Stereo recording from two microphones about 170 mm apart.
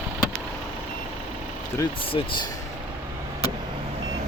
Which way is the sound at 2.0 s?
30° left (ahead or behind).